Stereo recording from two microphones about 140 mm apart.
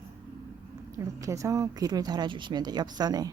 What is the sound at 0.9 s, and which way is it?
Speech, 20° right (ahead or behind).